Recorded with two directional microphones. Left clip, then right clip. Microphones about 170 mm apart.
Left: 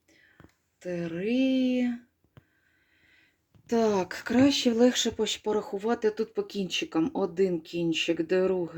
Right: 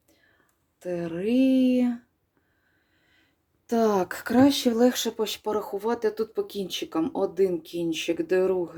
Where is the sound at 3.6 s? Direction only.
Centre (ahead or behind); by 5.2 s 20° left (ahead or behind).